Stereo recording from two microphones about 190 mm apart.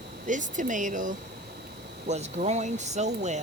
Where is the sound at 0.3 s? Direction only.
40° right (ahead or behind).